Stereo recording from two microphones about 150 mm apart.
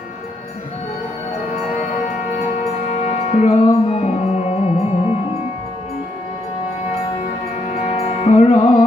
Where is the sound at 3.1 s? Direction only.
45° left (ahead or behind).